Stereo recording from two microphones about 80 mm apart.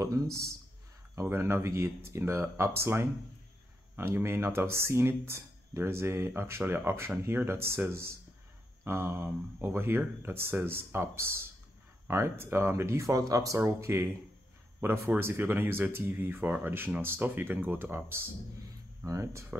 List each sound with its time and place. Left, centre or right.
0.0 s speech: right
8.8 s speech: right
13.6 s speech: right
19.0 s speech: right